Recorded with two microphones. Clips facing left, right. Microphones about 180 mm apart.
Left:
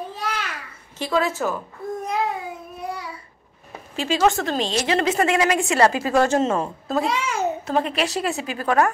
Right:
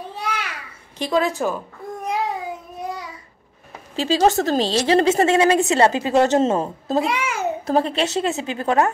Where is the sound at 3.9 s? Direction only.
35° right (ahead or behind).